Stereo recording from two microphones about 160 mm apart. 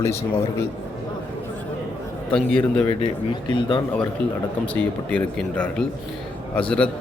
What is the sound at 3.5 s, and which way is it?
Speech, 30° left (ahead or behind).